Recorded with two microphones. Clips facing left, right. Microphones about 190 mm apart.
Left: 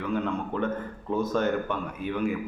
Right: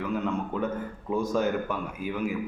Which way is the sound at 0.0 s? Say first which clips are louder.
Even; 5° right (ahead or behind).